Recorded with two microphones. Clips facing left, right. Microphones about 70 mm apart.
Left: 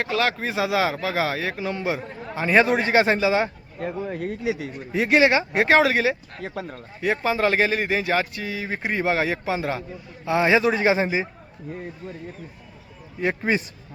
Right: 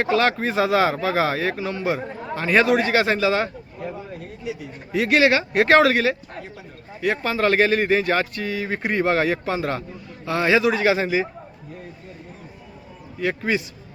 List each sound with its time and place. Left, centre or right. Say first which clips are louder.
0.0 s speech: right 4 dB; centre
2.6 s a man's voice: even; left
3.8 s speech: left 5 dB; left
4.9 s speech: right 1 dB; centre
6.4 s speech: left 7 dB; left
7.0 s a man's voice: even; centre
13.1 s a man's voice: even; left